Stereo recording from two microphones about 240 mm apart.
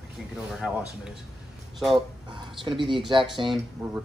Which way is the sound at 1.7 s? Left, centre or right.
Centre.